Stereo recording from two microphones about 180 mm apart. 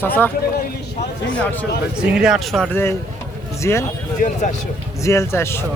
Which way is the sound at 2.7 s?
15° left (ahead or behind).